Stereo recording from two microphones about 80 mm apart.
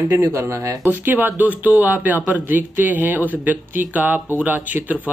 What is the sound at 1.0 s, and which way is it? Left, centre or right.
Speech, right.